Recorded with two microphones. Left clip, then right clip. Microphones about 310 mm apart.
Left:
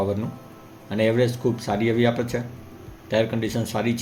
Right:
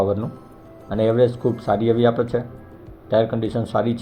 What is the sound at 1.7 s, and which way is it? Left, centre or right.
Speech, centre.